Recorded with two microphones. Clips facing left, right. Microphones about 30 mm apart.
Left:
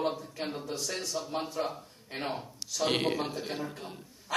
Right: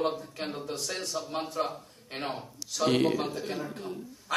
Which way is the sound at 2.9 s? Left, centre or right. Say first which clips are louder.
Right 4 dB; left.